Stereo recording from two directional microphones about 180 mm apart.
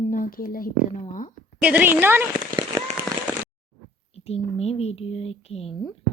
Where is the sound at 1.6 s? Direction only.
10° right (ahead or behind).